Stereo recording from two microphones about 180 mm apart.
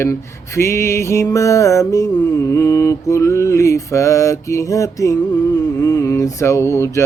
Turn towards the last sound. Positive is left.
turn(degrees=15)  # may be behind; listen again after turning